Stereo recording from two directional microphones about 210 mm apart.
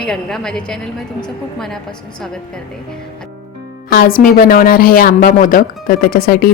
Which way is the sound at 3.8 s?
45° left (ahead or behind).